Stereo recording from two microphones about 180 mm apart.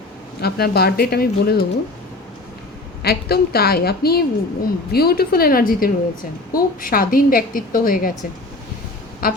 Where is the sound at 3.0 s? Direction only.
60° left (ahead or behind).